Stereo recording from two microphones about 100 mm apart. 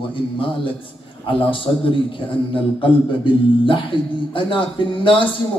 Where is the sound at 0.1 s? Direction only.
60° left (ahead or behind).